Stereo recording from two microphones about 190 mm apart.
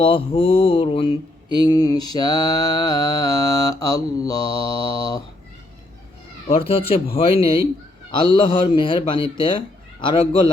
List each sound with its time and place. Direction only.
0.0 s mantra: 25° left (ahead or behind)
6.5 s speech: 30° left (ahead or behind)
8.1 s mantra: 25° left (ahead or behind)